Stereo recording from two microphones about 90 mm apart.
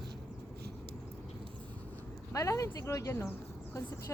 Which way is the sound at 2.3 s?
35° left (ahead or behind).